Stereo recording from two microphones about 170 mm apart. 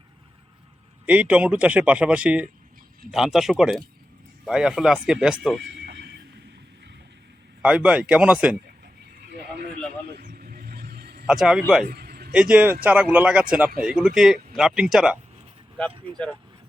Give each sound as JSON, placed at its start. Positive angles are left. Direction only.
{"t": 1.0, "sound": "a man's voice", "side_deg": -10}
{"t": 5.7, "sound": "neigh", "side_deg": -75}
{"t": 7.6, "sound": "a man's voice", "side_deg": -5}
{"t": 10.1, "sound": "vehicle", "side_deg": -60}
{"t": 11.3, "sound": "speech", "side_deg": -5}
{"t": 11.9, "sound": "a sound", "side_deg": -65}
{"t": 12.3, "sound": "a man's voice", "side_deg": -5}